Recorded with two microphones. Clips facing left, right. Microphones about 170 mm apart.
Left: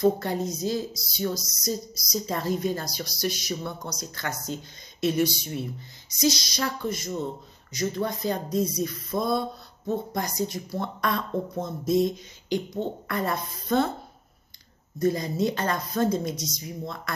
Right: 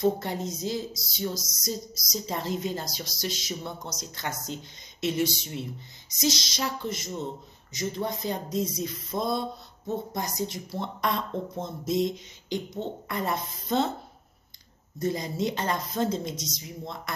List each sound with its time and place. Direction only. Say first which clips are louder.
0.0 s speech: left 3 dB; 20° right (ahead or behind)
15.0 s speech: left 4 dB; 20° right (ahead or behind)